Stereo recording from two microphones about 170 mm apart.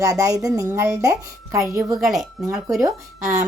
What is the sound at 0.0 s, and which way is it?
Speech, 20° right (ahead or behind).